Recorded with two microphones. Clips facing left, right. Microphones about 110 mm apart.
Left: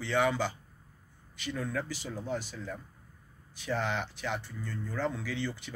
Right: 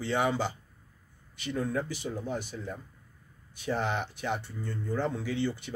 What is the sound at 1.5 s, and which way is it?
Speech, 25° right (ahead or behind).